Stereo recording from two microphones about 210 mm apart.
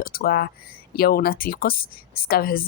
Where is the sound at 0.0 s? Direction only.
45° left (ahead or behind).